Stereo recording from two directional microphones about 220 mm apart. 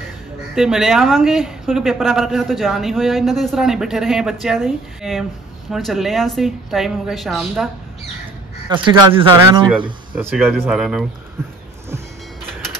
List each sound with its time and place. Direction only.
0.6 s speech: centre (ahead or behind)
8.6 s speech: 20° right (ahead or behind)
10.1 s speech: 5° right (ahead or behind)